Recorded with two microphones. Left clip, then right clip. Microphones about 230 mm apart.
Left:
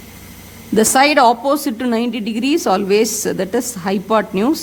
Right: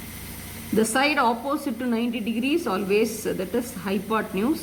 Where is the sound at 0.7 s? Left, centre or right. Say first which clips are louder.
Left 10 dB; left.